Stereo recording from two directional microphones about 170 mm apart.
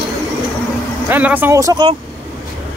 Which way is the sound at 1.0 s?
10° right (ahead or behind).